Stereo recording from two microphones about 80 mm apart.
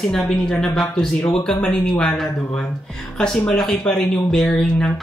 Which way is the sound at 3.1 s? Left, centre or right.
Centre.